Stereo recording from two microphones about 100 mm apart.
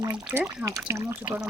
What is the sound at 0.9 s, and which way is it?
Speech, 30° right (ahead or behind).